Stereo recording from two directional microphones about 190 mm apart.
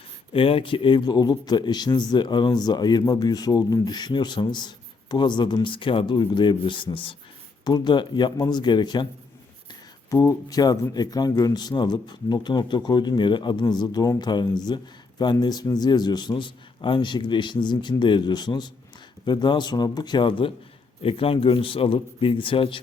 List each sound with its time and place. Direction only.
0.3 s a man's voice: 30° left (ahead or behind)
10.1 s a man's voice: 15° left (ahead or behind)